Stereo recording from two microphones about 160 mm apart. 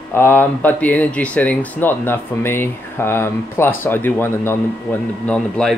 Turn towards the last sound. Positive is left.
turn(degrees=5)  # may be behind; listen again after turning